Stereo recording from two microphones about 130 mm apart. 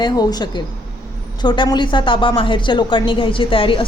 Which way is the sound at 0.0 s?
30° left (ahead or behind).